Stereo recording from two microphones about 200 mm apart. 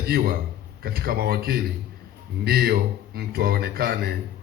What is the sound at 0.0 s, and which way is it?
A man's voice, 50° right (ahead or behind).